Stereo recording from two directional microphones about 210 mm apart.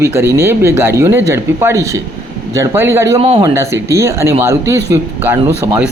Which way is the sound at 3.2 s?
25° right (ahead or behind).